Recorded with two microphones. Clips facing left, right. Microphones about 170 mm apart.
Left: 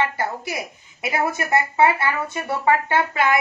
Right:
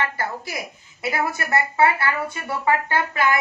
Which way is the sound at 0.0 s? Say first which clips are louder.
Left 3 dB; 20° left (ahead or behind).